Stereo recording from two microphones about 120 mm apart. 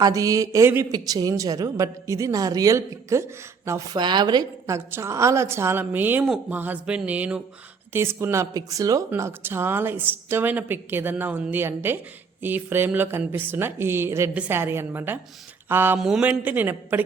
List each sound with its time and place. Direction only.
0.0 s a woman's voice: 30° right (ahead or behind)
4.0 s a woman's voice: 40° right (ahead or behind); by 16.0 s 20° right (ahead or behind)
16.0 s speech: 5° right (ahead or behind)